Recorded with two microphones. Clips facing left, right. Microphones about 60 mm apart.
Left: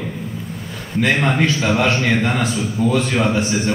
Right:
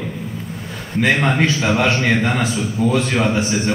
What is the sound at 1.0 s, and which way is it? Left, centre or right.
A man's voice, centre.